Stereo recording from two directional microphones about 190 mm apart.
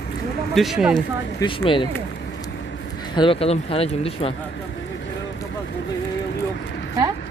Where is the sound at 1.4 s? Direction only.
25° left (ahead or behind).